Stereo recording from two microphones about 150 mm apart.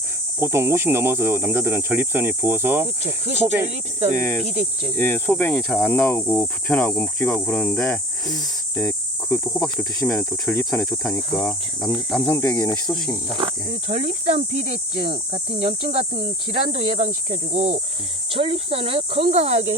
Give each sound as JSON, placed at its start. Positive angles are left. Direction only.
{"t": 0.3, "sound": "speech", "side_deg": -15}
{"t": 4.0, "sound": "speech", "side_deg": -60}
{"t": 4.4, "sound": "speech", "side_deg": -40}
{"t": 4.9, "sound": "cricket", "side_deg": 15}
{"t": 9.7, "sound": "speech", "side_deg": 5}
{"t": 10.7, "sound": "speech", "side_deg": 5}
{"t": 12.3, "sound": "speech", "side_deg": 20}
{"t": 13.7, "sound": "cricket", "side_deg": -50}
{"t": 18.3, "sound": "speech", "side_deg": -40}